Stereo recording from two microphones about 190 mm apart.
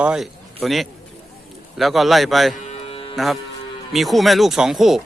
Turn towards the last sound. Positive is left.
turn(degrees=0)  # may be behind; listen again after turning